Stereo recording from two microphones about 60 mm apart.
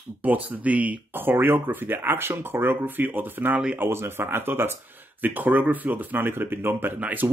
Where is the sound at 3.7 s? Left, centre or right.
Right.